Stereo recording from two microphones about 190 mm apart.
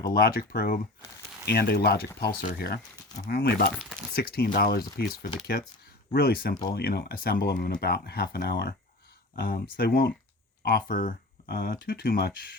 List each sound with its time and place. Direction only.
0.0 s speech: 55° left (ahead or behind)
6.1 s speech: 55° left (ahead or behind)